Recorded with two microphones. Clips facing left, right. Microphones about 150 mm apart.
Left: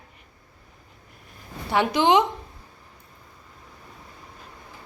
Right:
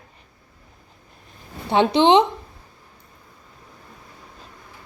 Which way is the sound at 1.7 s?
25° right (ahead or behind).